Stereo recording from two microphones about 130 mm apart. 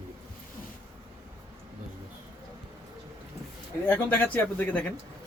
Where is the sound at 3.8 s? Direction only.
15° left (ahead or behind).